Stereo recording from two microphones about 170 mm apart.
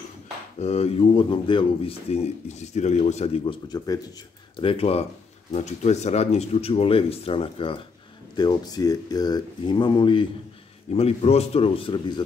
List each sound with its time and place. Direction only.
0.6 s speech: 35° left (ahead or behind)